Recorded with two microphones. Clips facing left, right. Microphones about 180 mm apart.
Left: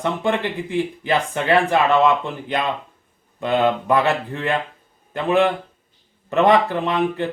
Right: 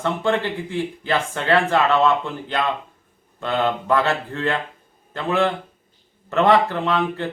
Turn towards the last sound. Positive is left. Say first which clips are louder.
# left 1 dB
turn(degrees=15)  # may be behind; listen again after turning